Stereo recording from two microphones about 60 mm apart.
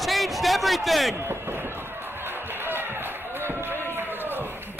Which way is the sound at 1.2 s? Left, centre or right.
Right.